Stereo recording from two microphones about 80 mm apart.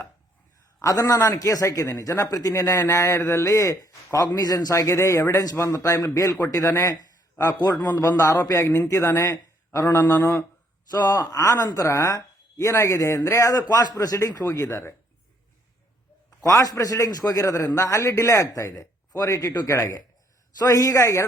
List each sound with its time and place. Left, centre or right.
0.8 s speech: left
3.4 s speech: left
4.7 s a man's voice: left
10.2 s speech: left
10.9 s speech: left
16.4 s speech: left